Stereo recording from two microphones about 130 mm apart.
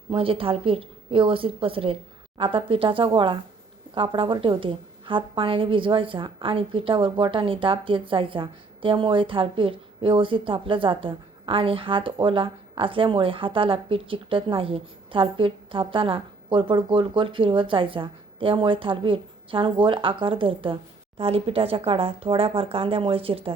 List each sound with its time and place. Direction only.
0.1 s a woman's voice: 45° right (ahead or behind)